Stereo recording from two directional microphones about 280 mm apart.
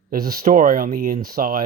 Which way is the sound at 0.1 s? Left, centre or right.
Right.